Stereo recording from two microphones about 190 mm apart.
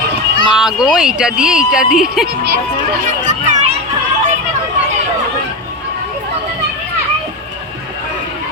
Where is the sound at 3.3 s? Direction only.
40° right (ahead or behind).